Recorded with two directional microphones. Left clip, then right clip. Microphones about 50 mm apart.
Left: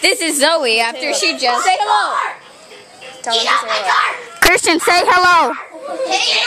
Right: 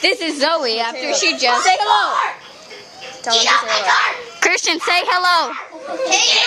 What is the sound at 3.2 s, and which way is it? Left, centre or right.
Speech, right.